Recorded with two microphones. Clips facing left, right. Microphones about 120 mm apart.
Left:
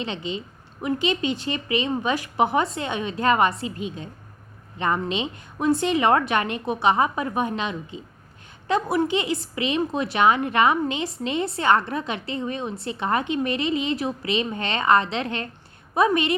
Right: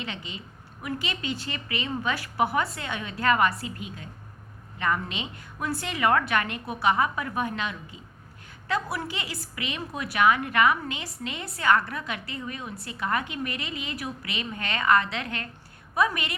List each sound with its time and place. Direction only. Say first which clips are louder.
0.0 s a woman's voice: left 8 dB; 25° left (ahead or behind)